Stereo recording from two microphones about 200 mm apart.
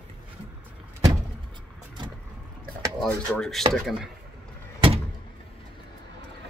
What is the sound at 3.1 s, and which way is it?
Speech, 5° left (ahead or behind).